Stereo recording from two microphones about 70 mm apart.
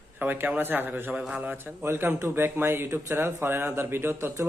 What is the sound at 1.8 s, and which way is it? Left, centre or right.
Speech, right.